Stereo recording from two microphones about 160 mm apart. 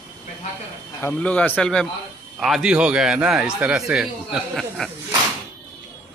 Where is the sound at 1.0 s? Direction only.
10° left (ahead or behind).